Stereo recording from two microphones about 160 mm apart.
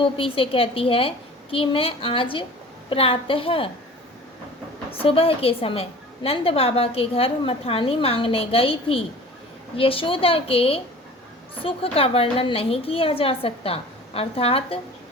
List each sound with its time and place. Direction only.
0.0 s a woman's voice: 35° left (ahead or behind)
4.9 s a woman's voice: 35° left (ahead or behind)